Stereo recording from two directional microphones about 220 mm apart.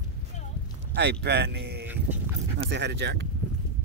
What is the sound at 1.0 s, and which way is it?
Speech, 50° right (ahead or behind).